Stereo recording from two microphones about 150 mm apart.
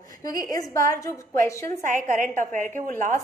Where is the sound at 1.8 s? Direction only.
55° right (ahead or behind).